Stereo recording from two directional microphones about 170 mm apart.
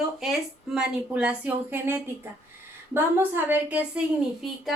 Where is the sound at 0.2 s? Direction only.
Centre (ahead or behind).